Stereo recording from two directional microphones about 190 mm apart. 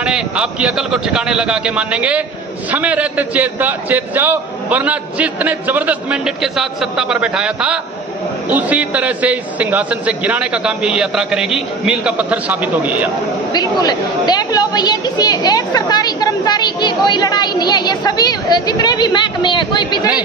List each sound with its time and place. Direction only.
0.0 s a man's voice: 5° right (ahead or behind)
13.5 s a woman's voice: 20° left (ahead or behind)